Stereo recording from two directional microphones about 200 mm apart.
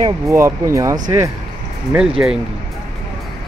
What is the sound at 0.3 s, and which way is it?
Speech, 15° right (ahead or behind).